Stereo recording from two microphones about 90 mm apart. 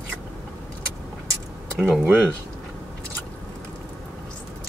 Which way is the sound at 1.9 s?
20° right (ahead or behind).